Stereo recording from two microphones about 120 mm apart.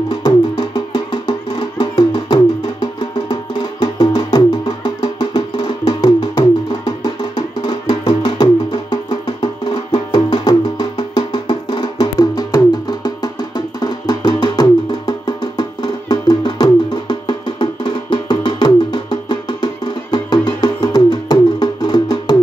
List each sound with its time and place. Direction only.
0.1 s music: 35° left (ahead or behind)